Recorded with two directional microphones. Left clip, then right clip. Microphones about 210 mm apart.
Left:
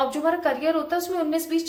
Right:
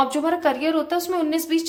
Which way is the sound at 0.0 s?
45° right (ahead or behind).